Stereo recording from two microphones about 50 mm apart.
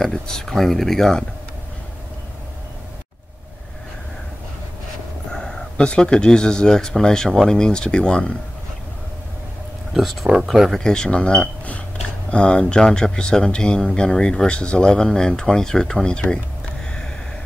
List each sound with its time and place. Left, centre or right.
0.0 s speech: centre
5.3 s speech: centre
10.4 s speech: centre
10.8 s speech: centre